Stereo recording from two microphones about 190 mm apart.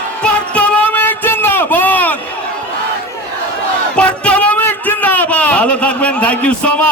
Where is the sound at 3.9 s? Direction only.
5° left (ahead or behind).